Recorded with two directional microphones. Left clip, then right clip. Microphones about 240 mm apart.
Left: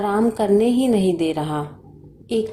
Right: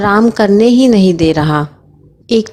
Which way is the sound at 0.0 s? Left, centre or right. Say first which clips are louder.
Right 9 dB; right.